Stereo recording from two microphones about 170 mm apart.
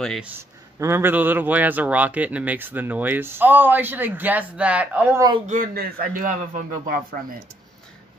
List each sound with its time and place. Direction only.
0.2 s speech: 15° right (ahead or behind)
5.5 s a man's voice: 55° right (ahead or behind)